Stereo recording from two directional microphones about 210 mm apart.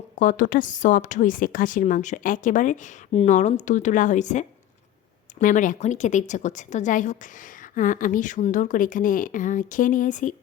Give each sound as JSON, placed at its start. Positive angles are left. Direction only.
{"t": 0.2, "sound": "a woman's voice", "side_deg": 40}